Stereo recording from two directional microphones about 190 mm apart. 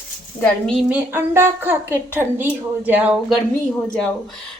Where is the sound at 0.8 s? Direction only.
10° right (ahead or behind).